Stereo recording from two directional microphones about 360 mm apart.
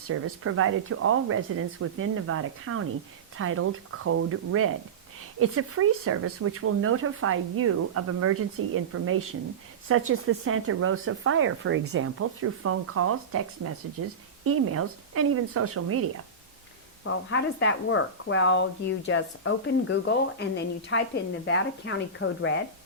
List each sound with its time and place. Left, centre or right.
0.1 s speech: right
17.0 s speech: left